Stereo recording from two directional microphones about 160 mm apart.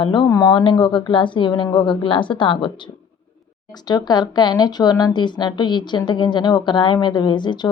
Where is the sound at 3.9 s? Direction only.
25° left (ahead or behind).